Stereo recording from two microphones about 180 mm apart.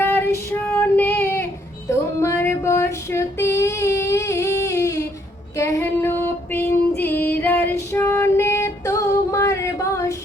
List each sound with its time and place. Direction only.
0.0 s child singing: 10° left (ahead or behind)
5.5 s female singing: 15° left (ahead or behind)